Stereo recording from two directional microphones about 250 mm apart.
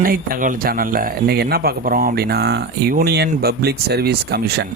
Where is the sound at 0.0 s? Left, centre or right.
Right.